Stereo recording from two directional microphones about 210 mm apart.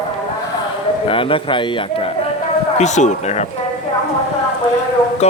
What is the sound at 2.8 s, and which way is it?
Speech, 35° left (ahead or behind).